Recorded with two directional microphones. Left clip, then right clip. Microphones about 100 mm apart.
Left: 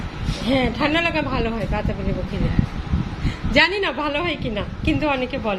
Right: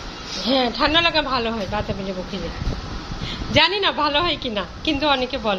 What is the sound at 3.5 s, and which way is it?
A woman's voice, 10° left (ahead or behind).